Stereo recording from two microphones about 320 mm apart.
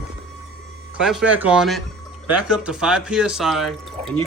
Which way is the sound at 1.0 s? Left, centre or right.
Centre.